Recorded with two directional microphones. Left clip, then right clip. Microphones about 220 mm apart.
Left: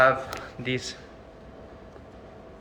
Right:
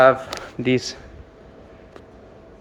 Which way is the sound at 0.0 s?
40° right (ahead or behind).